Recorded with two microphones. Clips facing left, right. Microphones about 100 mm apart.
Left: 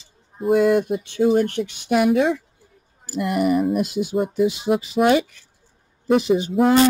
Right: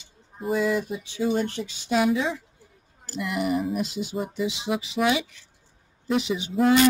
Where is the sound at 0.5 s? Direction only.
60° left (ahead or behind).